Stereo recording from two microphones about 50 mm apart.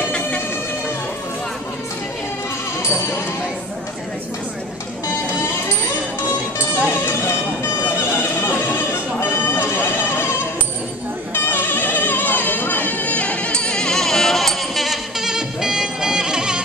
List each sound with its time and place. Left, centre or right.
6.7 s music: left
11.3 s music: left; by 16.6 s centre